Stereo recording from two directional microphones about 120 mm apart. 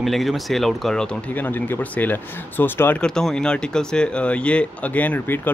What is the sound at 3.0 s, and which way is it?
Speech, 5° left (ahead or behind).